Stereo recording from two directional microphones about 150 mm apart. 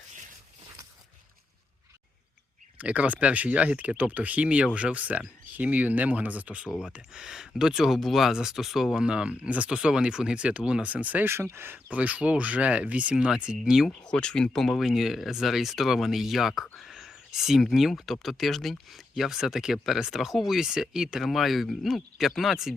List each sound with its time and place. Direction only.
2.7 s speech: 10° right (ahead or behind)